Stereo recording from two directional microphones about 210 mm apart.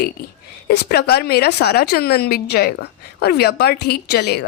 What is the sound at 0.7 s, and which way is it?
Speech, 50° left (ahead or behind).